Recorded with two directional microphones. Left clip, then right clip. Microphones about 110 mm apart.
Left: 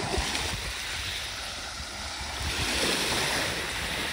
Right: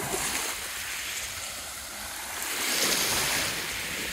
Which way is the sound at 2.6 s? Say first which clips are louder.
Right 1 dB; 60° left (ahead or behind).